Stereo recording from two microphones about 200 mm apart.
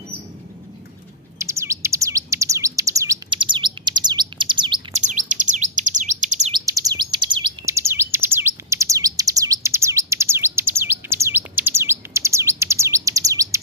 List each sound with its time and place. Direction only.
1.4 s bird: 15° right (ahead or behind)
5.0 s bird: 40° right (ahead or behind)
6.7 s bird: 15° right (ahead or behind)